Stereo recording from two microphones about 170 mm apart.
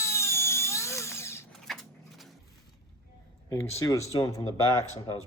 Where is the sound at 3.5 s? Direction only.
15° left (ahead or behind).